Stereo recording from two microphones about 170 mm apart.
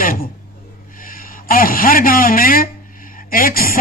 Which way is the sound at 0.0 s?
55° left (ahead or behind).